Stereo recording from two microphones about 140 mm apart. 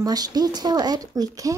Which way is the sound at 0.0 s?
30° right (ahead or behind).